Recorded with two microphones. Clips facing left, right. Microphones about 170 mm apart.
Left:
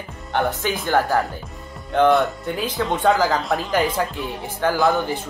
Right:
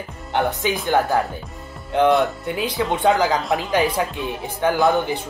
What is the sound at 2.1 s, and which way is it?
Speech, centre (ahead or behind).